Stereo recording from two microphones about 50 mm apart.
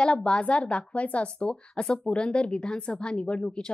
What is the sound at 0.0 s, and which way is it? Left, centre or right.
A woman's voice, centre.